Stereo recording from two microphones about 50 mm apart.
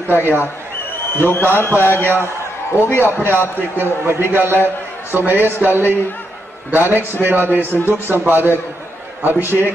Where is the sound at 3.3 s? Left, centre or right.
Right.